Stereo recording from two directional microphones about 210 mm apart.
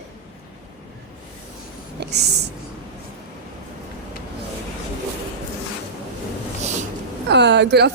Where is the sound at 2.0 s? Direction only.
50° right (ahead or behind).